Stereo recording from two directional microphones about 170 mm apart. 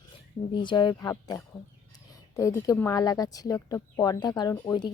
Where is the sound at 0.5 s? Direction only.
25° left (ahead or behind).